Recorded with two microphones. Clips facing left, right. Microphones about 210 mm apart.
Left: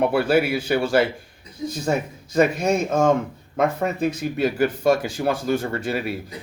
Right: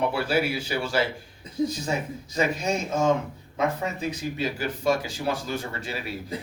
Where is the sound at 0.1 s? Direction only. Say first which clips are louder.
Left 6 dB; 55° left (ahead or behind).